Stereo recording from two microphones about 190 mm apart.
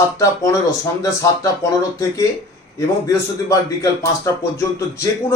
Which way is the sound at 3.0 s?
15° left (ahead or behind).